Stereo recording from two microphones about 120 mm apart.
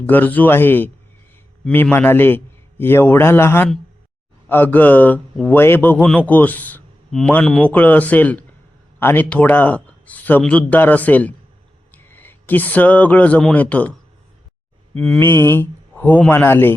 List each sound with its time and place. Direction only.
0.0 s a man's voice: 15° left (ahead or behind)
7.1 s speech: 5° left (ahead or behind)
14.9 s speech: 5° left (ahead or behind)
15.2 s speech: 20° left (ahead or behind)